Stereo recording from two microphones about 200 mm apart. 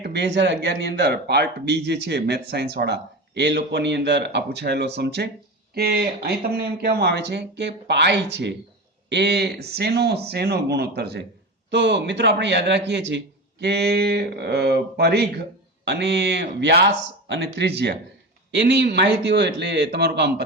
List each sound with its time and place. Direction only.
0.0 s speech: 60° right (ahead or behind)